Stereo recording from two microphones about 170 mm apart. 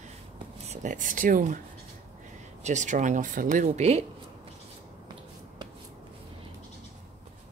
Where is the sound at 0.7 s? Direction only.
50° right (ahead or behind).